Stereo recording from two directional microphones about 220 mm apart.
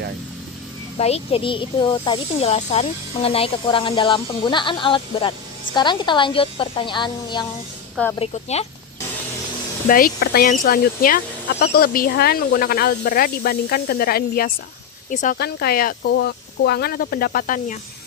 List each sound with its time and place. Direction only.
0.9 s speech: 30° left (ahead or behind)
9.8 s speech: 40° left (ahead or behind)